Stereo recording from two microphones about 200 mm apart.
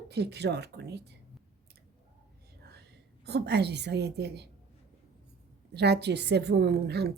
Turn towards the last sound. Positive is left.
turn(degrees=-55)  # may be behind; listen again after turning